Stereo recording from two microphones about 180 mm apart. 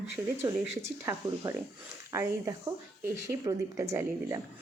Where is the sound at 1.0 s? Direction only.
20° right (ahead or behind).